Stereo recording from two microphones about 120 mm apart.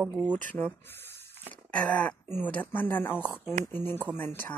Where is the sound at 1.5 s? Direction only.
10° left (ahead or behind).